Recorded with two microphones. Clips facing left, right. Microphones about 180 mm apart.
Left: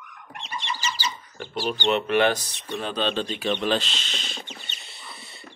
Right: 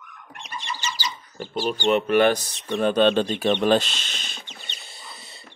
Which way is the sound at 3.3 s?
40° right (ahead or behind).